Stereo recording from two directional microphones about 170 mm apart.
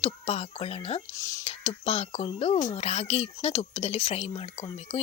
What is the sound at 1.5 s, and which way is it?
Speech, 35° left (ahead or behind).